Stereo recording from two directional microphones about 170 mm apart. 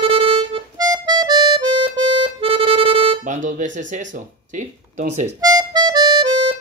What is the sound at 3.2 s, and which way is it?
Music, 50° right (ahead or behind).